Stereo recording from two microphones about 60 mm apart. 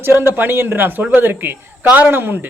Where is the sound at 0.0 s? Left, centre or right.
Right.